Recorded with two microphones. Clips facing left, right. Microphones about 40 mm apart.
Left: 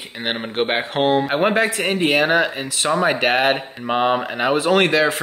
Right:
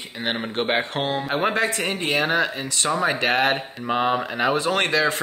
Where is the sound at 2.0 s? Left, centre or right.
Left.